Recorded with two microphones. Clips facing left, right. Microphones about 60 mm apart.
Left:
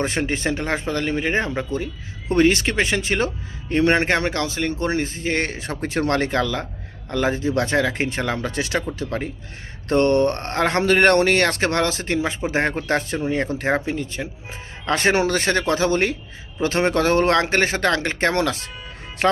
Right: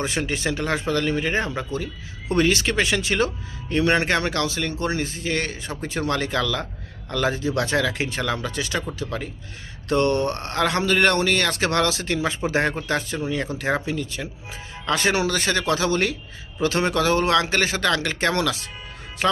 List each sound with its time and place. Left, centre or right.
0.0 s speech: left
0.3 s speech: left
5.5 s speech: left
6.3 s speech: left
8.5 s speech: left
9.0 s a man's voice: left
11.6 s speech: left
12.9 s speech: left
13.1 s a man's voice: left
14.8 s a man's voice: left